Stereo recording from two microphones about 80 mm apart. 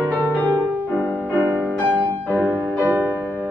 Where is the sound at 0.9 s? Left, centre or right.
Left.